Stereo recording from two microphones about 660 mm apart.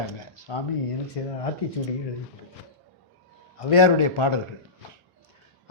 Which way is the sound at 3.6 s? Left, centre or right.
Left.